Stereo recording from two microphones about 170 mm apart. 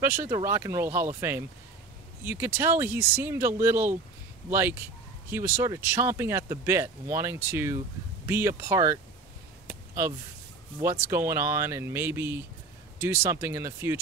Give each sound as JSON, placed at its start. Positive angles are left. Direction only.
{"t": 0.0, "sound": "speech", "side_deg": -15}
{"t": 9.7, "sound": "a sound", "side_deg": -15}
{"t": 10.8, "sound": "speech", "side_deg": -15}